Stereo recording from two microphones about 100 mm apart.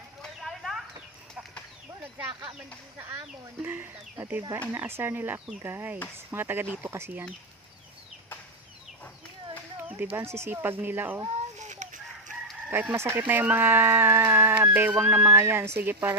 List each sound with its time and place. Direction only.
0.2 s clip-clop: centre (ahead or behind)
3.0 s speech: 25° right (ahead or behind)
10.2 s speech: 25° right (ahead or behind)
12.7 s speech: 15° right (ahead or behind)
13.0 s speech: 25° right (ahead or behind)
13.2 s speech: 15° right (ahead or behind)